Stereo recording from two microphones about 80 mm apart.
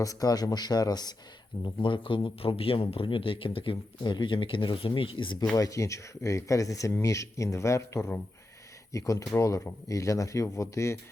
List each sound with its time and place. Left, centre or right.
0.0 s speech: left
1.6 s speech: left
5.5 s speech: left